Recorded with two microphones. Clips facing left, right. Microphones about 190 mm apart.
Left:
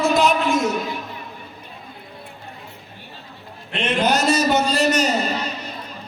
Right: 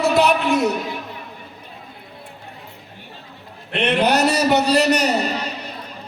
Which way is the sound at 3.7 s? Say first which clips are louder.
Right 2 dB; 65° right (ahead or behind).